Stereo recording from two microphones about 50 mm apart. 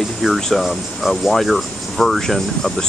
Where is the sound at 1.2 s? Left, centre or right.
Centre.